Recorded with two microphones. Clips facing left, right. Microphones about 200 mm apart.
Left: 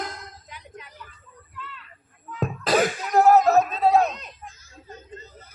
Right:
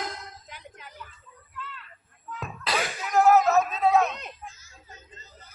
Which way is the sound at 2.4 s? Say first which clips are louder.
Left 9 dB; 45° left (ahead or behind).